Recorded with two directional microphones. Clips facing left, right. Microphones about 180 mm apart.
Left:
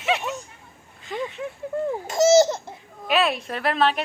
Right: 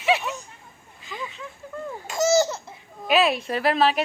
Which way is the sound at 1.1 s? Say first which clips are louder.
Left 7 dB; 60° left (ahead or behind).